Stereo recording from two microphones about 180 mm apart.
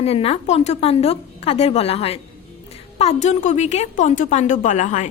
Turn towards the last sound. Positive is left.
turn(degrees=40)  # may be behind; listen again after turning